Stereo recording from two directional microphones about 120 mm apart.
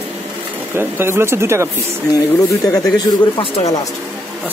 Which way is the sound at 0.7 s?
20° right (ahead or behind).